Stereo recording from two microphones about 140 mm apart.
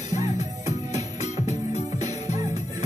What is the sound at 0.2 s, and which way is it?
Music, 25° right (ahead or behind).